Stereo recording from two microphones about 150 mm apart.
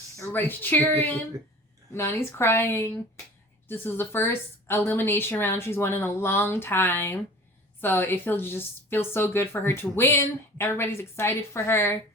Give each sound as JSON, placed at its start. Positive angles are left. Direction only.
{"t": 0.2, "sound": "a woman's voice", "side_deg": 15}